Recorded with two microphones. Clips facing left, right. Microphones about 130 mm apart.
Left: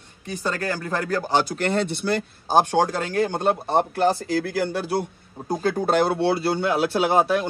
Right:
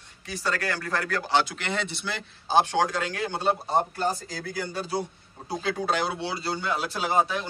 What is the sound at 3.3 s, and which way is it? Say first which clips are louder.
Speech: even; 55° left (ahead or behind).